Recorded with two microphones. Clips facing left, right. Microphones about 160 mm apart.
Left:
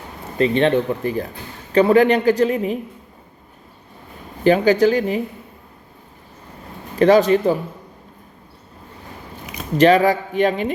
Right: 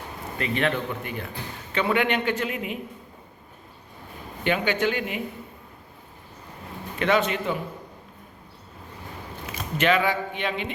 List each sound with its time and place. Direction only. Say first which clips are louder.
0.3 s a man's voice: left 10 dB; 30° left (ahead or behind)
4.4 s a man's voice: left 10 dB; 35° left (ahead or behind)
7.0 s a man's voice: left 10 dB; 35° left (ahead or behind)
9.7 s a man's voice: left 9 dB; 35° left (ahead or behind)